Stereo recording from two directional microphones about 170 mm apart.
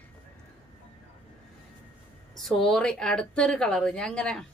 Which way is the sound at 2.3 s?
Centre (ahead or behind).